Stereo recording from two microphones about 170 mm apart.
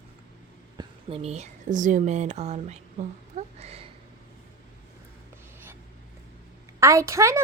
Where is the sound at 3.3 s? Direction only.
35° right (ahead or behind).